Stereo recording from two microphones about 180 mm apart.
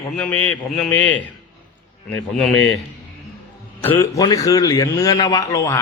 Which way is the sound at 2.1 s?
Centre (ahead or behind).